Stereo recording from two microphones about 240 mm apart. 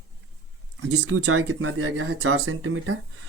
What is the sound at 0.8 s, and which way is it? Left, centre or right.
Speech, right.